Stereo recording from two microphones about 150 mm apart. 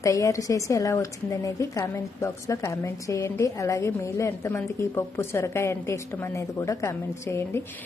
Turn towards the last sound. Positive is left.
turn(degrees=20)  # may be behind; listen again after turning